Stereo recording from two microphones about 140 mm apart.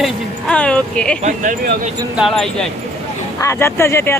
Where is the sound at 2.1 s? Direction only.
Centre (ahead or behind).